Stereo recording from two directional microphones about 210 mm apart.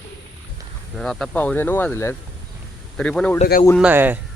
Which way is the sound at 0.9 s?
Centre (ahead or behind).